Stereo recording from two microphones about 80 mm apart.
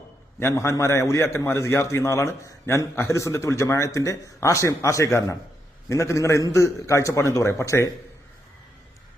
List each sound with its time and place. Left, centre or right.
0.5 s a man's voice: left